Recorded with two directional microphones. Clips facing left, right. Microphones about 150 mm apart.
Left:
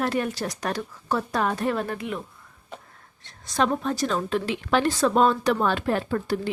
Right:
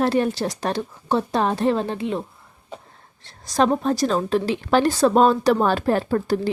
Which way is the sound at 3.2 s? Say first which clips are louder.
Right 5 dB; 35° right (ahead or behind).